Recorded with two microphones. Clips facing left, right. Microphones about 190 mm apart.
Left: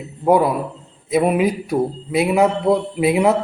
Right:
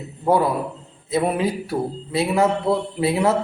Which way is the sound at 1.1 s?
15° left (ahead or behind).